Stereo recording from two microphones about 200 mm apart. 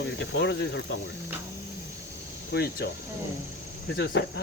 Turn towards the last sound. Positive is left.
turn(degrees=55)  # may be behind; listen again after turning